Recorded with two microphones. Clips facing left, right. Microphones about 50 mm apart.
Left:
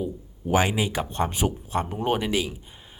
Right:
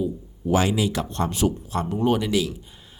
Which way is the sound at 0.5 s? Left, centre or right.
Left.